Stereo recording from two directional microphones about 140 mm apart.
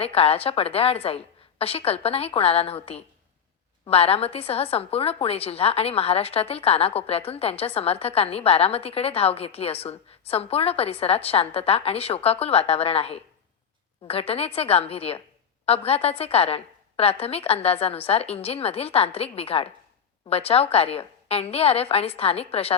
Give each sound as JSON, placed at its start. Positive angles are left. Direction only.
{"t": 0.0, "sound": "a woman's voice", "side_deg": 45}